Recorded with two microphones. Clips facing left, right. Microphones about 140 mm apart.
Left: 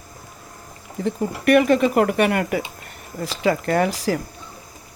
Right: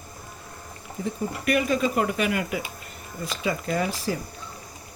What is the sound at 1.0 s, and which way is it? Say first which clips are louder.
Speech: left 5 dB; 80° left.